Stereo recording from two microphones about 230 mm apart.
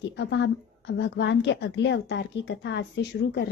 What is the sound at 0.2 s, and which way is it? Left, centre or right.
A woman's voice, left.